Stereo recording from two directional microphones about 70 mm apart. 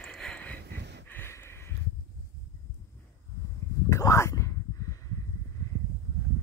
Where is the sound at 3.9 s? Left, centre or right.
Left.